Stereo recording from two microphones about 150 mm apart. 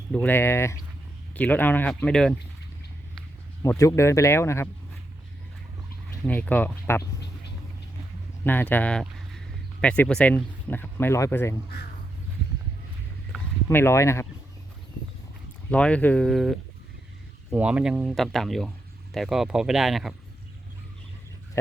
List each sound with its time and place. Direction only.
0.1 s speech: 5° left (ahead or behind)
0.3 s speech: 15° left (ahead or behind)
3.6 s speech: 20° left (ahead or behind)
6.2 s speech: 10° left (ahead or behind)
8.4 s speech: 10° left (ahead or behind)
13.7 s speech: 15° left (ahead or behind)
15.7 s speech: 10° left (ahead or behind)